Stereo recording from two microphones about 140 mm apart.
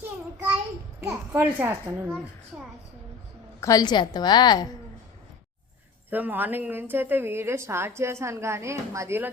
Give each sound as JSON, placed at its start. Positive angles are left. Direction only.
{"t": 1.0, "sound": "a woman's voice", "side_deg": -15}
{"t": 3.6, "sound": "a woman's voice", "side_deg": 25}
{"t": 6.1, "sound": "a woman's voice", "side_deg": -10}